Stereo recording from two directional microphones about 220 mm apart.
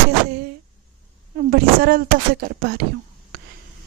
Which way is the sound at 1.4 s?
45° right (ahead or behind).